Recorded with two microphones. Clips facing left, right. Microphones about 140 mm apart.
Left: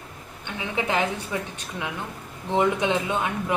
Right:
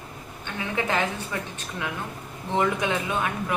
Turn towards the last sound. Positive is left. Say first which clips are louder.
# left 1 dB
turn(degrees=25)  # may be behind; listen again after turning